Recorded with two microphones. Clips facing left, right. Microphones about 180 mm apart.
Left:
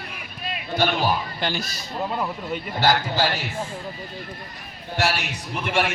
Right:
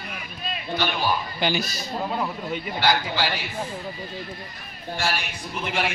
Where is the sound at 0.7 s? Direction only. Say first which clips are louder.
Left 4 dB; 45° left (ahead or behind).